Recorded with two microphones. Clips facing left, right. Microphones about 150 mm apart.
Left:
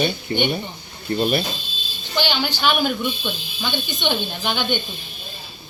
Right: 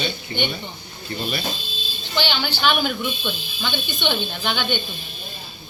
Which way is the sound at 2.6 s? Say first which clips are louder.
Even; 5° left (ahead or behind).